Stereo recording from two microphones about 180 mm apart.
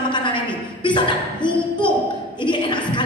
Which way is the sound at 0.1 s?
25° left (ahead or behind).